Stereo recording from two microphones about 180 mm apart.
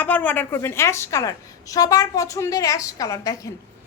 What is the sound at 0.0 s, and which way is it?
A woman's voice, 10° left (ahead or behind).